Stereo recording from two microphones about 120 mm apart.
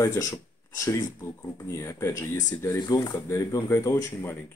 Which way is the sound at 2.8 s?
30° left (ahead or behind).